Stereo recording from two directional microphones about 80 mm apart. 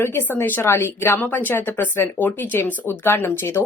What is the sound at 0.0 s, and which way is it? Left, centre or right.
Speech, left.